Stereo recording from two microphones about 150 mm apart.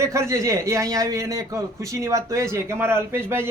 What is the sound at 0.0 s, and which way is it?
A man's voice, 20° right (ahead or behind).